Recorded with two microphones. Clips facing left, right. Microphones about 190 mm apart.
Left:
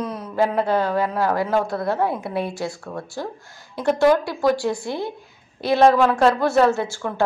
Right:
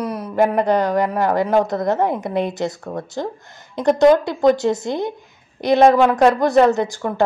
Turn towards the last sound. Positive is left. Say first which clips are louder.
# right 3 dB
turn(degrees=-15)  # may be behind; listen again after turning